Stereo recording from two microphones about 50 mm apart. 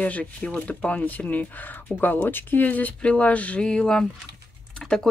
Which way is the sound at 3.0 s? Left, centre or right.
Left.